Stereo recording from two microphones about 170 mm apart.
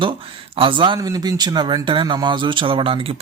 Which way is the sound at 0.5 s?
30° right (ahead or behind).